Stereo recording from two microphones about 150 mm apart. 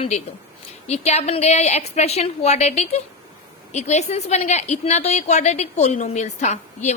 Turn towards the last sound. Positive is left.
turn(degrees=50)  # may be behind; listen again after turning